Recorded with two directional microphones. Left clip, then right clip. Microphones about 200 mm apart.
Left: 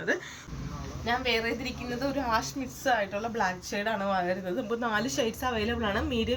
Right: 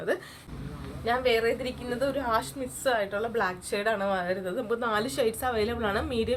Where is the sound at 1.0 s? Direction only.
15° right (ahead or behind).